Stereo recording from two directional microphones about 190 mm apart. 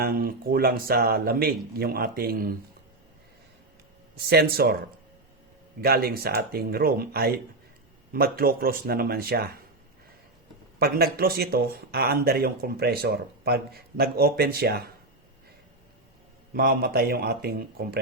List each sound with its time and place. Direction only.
0.0 s speech: 50° right (ahead or behind)
4.1 s a man's voice: 55° right (ahead or behind)
5.8 s speech: 55° right (ahead or behind)
10.8 s a man's voice: 55° right (ahead or behind)
16.6 s speech: 55° right (ahead or behind)